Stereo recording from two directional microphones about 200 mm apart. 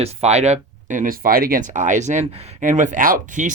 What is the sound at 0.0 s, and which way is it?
Speech, 30° right (ahead or behind).